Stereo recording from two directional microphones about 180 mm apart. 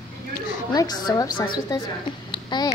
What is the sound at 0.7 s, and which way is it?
A woman's voice, 20° left (ahead or behind).